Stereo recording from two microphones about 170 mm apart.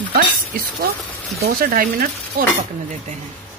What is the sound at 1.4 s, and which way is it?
Speech, 55° right (ahead or behind).